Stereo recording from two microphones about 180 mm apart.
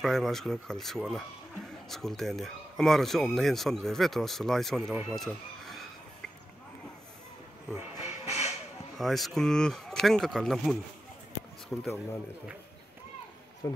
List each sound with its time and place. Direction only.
0.0 s speech: centre (ahead or behind)
5.0 s chicken: centre (ahead or behind)
7.7 s a sound: 15° right (ahead or behind)
8.9 s speech: centre (ahead or behind)